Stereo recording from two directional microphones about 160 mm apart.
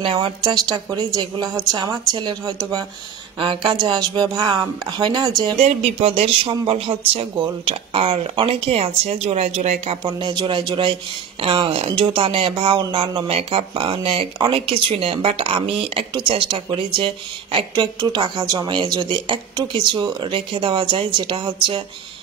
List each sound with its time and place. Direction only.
0.0 s a woman's voice: 30° right (ahead or behind)
5.6 s speech: 40° right (ahead or behind)